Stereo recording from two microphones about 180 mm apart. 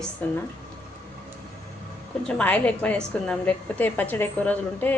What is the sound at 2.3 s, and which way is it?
A woman's voice, 5° left (ahead or behind).